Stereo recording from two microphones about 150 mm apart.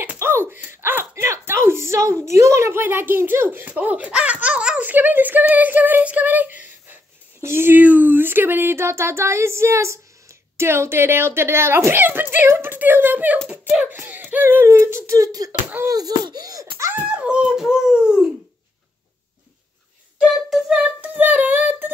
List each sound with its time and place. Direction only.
0.0 s a sound: 15° right (ahead or behind)
2.2 s speech: 20° right (ahead or behind)
20.4 s singing: centre (ahead or behind)